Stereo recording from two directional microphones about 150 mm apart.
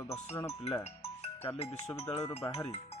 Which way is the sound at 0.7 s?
40° left (ahead or behind).